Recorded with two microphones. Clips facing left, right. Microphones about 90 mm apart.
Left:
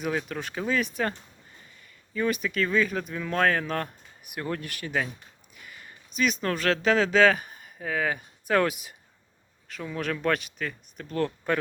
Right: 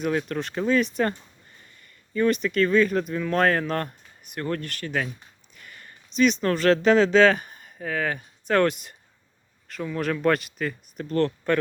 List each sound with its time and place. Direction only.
0.0 s speech: 5° left (ahead or behind)
5.5 s a sound: 5° left (ahead or behind)
6.1 s speech: 5° left (ahead or behind)
11.2 s speech: 10° left (ahead or behind)